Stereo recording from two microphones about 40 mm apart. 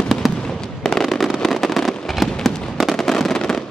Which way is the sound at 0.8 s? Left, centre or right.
Centre.